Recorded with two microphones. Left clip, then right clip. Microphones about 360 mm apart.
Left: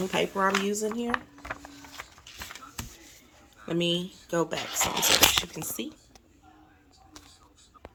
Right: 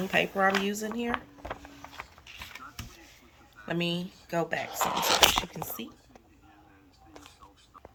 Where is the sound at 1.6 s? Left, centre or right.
Centre.